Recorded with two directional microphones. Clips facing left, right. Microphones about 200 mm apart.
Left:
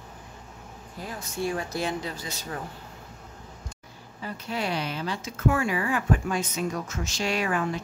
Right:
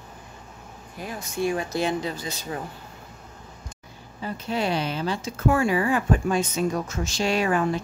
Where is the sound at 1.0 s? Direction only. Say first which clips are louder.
Right 4 dB; 15° right (ahead or behind).